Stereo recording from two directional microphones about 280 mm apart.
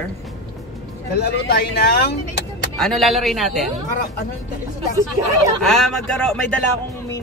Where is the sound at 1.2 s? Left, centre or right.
Left.